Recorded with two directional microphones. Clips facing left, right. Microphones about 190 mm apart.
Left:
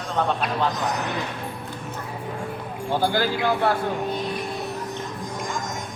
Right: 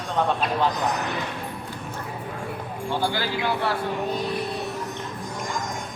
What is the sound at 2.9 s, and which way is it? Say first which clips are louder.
Speech: left 4 dB; 45° left (ahead or behind).